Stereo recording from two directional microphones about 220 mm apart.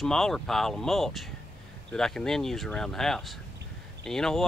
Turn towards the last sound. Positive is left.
turn(degrees=0)  # may be behind; listen again after turning